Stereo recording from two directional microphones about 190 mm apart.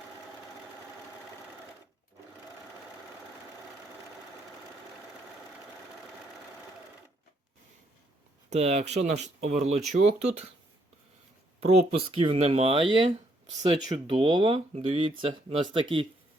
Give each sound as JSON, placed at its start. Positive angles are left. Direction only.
{"t": 8.4, "sound": "speech", "side_deg": -35}
{"t": 11.6, "sound": "speech", "side_deg": -35}